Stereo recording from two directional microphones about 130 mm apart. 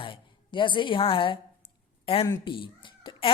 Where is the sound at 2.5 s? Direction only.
40° left (ahead or behind).